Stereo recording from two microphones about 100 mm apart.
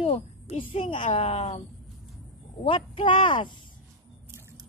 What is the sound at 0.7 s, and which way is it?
Speech, 55° left (ahead or behind).